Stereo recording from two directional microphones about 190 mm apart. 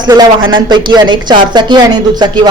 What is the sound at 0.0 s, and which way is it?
Speech, 20° right (ahead or behind).